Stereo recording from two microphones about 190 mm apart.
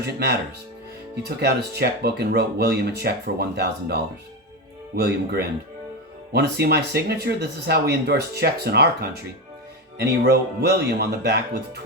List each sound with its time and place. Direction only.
0.0 s speech: 60° right (ahead or behind)
4.9 s speech: 60° right (ahead or behind)